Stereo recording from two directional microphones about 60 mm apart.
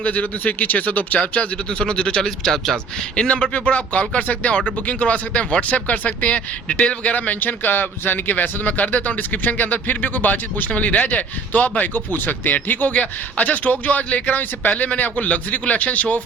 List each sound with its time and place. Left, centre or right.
0.0 s speech: left